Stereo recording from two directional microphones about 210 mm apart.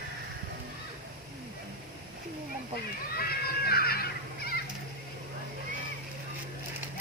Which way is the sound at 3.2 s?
45° left (ahead or behind).